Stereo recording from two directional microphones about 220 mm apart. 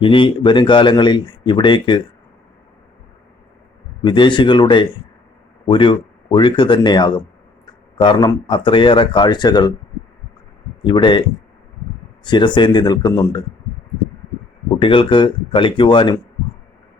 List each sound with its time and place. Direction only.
0.0 s speech: 25° left (ahead or behind)
4.0 s speech: 20° left (ahead or behind)
10.8 s speech: 20° left (ahead or behind)
12.2 s speech: 20° left (ahead or behind)
14.8 s speech: 25° left (ahead or behind)